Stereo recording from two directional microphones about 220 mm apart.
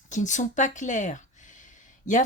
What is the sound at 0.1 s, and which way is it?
Speech, 35° left (ahead or behind).